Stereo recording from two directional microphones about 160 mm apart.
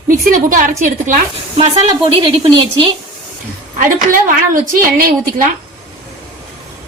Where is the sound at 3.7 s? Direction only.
60° right (ahead or behind).